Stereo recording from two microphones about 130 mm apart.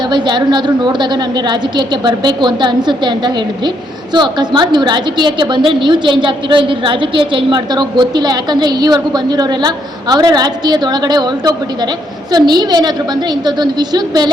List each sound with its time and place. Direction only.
0.0 s a woman's voice: 35° right (ahead or behind)